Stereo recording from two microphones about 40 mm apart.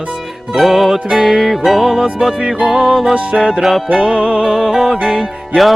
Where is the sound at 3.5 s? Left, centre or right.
Centre.